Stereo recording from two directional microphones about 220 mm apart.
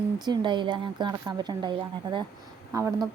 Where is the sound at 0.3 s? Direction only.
20° right (ahead or behind).